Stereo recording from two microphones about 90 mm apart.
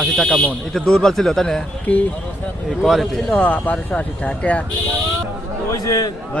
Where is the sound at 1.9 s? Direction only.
15° left (ahead or behind).